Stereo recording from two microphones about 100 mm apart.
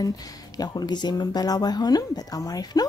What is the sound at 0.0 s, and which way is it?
Speech, 40° left (ahead or behind).